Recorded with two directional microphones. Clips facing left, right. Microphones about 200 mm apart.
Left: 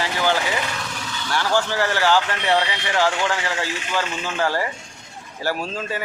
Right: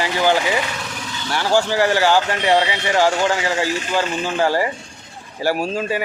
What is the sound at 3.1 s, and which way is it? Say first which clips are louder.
Speech: right 5 dB; 40° right (ahead or behind).